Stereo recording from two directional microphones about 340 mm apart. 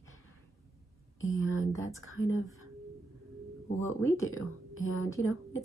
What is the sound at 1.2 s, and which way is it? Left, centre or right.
Speech, left.